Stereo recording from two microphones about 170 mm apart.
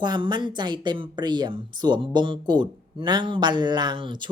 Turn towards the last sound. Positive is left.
turn(degrees=-30)  # may be behind; listen again after turning